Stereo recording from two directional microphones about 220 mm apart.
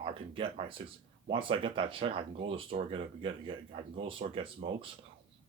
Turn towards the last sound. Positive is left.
turn(degrees=-25)  # may be behind; listen again after turning